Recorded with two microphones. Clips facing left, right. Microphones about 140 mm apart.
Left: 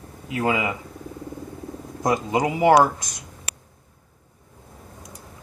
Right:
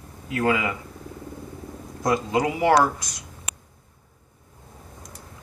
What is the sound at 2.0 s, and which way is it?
Speech, 20° left (ahead or behind).